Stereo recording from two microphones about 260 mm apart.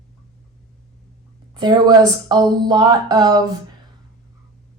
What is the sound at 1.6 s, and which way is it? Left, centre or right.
A woman's voice, centre.